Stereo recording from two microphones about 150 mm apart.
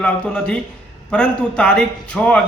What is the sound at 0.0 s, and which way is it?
A man's voice, 5° left (ahead or behind).